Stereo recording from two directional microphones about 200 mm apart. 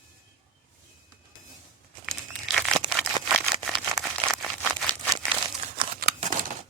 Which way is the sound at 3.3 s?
Centre (ahead or behind).